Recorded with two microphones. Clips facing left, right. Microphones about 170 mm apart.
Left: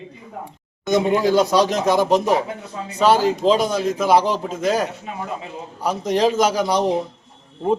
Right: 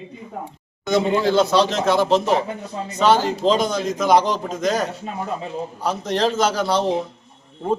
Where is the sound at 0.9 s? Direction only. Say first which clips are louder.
Left 1 dB; 15° left (ahead or behind).